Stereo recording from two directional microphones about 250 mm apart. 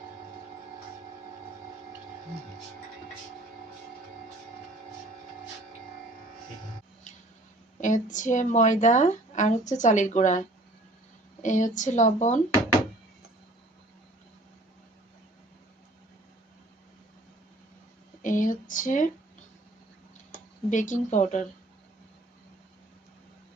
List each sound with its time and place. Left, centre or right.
7.8 s a woman's voice: left
11.4 s a woman's voice: left
18.2 s a sound: left
20.7 s a woman's voice: left